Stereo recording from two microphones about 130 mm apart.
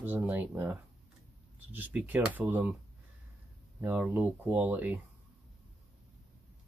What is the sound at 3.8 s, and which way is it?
Speech, 15° right (ahead or behind).